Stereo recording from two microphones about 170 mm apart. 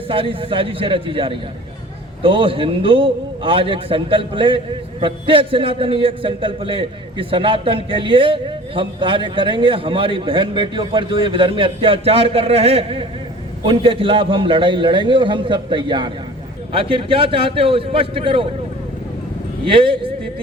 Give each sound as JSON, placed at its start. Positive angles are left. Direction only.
{"t": 0.1, "sound": "a man's voice", "side_deg": -30}
{"t": 19.6, "sound": "a man's voice", "side_deg": -30}